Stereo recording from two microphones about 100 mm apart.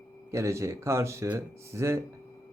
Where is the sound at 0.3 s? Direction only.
30° right (ahead or behind).